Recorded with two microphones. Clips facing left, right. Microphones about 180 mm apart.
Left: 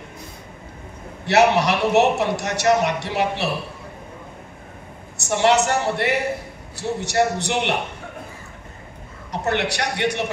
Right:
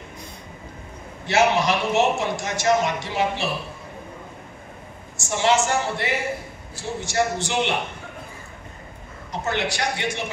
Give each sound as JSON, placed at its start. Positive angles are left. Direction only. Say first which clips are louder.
{"t": 1.2, "sound": "a man's voice", "louder": "left 3 dB", "side_deg": 70}
{"t": 5.1, "sound": "a man's voice", "louder": "left 3 dB", "side_deg": 65}
{"t": 9.3, "sound": "a man's voice", "louder": "left 3 dB", "side_deg": 65}